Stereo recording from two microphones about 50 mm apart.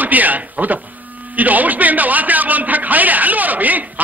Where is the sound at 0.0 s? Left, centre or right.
Right.